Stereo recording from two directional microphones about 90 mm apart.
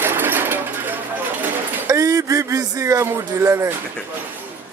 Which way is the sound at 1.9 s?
35° right (ahead or behind).